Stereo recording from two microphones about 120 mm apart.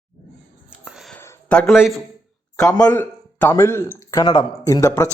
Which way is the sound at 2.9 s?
15° left (ahead or behind).